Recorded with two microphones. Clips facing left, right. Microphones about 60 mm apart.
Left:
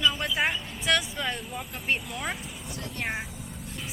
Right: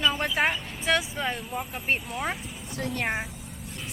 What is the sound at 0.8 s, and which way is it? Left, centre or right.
Speech, right.